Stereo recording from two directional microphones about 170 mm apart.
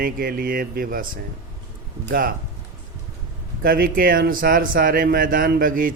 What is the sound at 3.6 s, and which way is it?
Speech, 60° right (ahead or behind).